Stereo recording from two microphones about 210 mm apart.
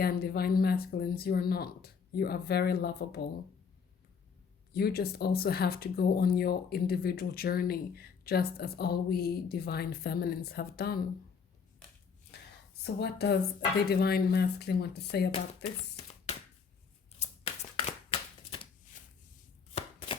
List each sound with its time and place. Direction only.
0.0 s speech: 50° left (ahead or behind)
4.7 s speech: 45° left (ahead or behind)
12.8 s speech: 50° left (ahead or behind)
15.3 s speech: 30° left (ahead or behind)
17.2 s shuffling cards: 30° left (ahead or behind)
19.7 s chopping: 25° left (ahead or behind)